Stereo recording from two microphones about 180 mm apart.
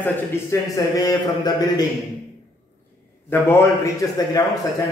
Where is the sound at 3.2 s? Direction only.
10° left (ahead or behind).